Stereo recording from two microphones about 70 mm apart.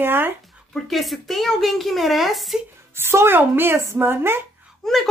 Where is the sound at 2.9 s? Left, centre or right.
Right.